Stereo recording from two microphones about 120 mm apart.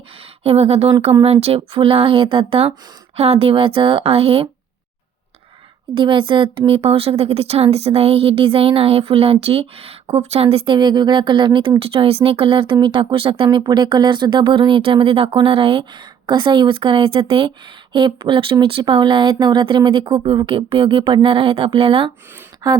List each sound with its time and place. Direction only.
0.2 s a sound: 55° right (ahead or behind)
1.2 s speech: 55° right (ahead or behind)
5.9 s speech: 45° right (ahead or behind)
13.7 s speech: 40° right (ahead or behind)
22.6 s a woman's voice: 35° right (ahead or behind)